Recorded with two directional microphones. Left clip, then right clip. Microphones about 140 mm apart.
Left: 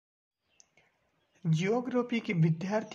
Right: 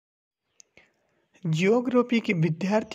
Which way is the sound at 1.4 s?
55° right (ahead or behind).